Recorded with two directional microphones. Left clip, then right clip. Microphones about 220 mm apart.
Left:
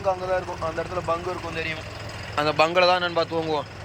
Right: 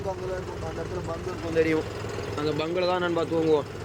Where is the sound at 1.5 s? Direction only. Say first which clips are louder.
Right 6 dB; 15° right (ahead or behind).